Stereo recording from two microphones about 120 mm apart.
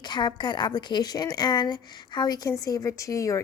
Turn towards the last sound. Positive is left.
turn(degrees=25)  # may be behind; listen again after turning